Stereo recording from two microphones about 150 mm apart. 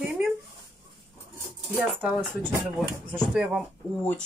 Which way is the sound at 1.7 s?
10° right (ahead or behind).